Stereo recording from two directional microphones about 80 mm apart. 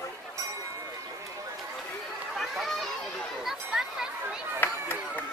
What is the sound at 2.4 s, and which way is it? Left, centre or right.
Speech, centre.